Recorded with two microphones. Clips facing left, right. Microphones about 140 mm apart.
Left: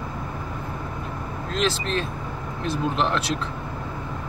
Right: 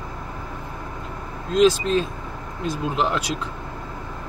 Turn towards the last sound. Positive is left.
turn(degrees=-10)  # may be behind; listen again after turning